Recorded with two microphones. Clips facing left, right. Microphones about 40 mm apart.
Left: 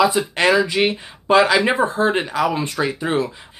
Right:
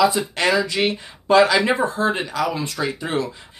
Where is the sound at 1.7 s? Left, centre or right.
Left.